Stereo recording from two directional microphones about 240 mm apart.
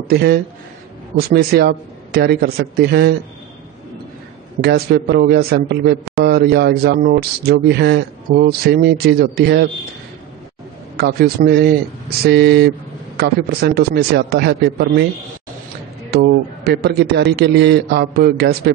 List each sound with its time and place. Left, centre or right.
0.1 s a man's voice: right
4.6 s a man's voice: right
11.0 s a man's voice: right
16.1 s a man's voice: right